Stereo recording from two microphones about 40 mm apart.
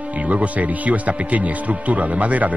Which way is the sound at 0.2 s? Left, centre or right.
Right.